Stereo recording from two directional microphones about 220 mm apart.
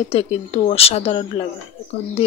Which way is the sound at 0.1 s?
30° left (ahead or behind).